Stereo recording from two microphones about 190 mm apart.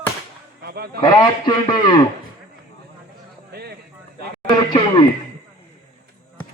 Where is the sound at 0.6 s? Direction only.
55° right (ahead or behind).